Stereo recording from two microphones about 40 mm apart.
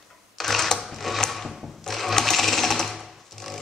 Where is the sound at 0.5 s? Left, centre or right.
Centre.